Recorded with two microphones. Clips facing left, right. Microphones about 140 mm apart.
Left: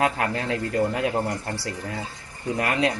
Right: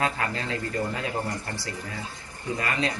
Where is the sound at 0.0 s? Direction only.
70° left (ahead or behind).